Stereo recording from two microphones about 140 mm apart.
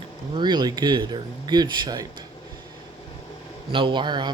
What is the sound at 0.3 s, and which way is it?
Speech, 30° right (ahead or behind).